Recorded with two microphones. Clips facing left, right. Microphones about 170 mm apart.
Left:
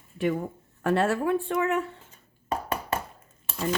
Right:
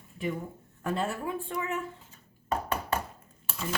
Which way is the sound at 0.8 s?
75° left (ahead or behind).